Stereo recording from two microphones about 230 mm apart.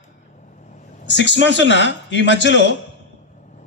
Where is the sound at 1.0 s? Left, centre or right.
Left.